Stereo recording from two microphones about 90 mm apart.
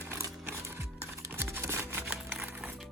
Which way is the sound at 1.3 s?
25° right (ahead or behind).